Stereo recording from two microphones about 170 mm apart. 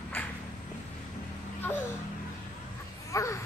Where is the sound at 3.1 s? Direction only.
20° left (ahead or behind).